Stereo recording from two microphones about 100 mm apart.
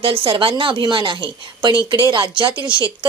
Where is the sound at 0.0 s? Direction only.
60° right (ahead or behind).